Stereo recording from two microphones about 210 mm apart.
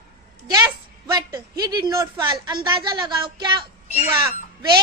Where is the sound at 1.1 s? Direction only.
20° right (ahead or behind).